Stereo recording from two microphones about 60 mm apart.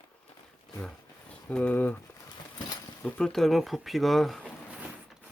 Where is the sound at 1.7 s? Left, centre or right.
Left.